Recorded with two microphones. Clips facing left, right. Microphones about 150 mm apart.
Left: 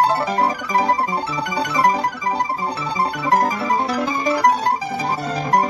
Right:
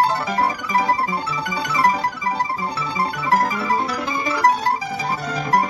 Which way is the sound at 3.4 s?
35° left (ahead or behind).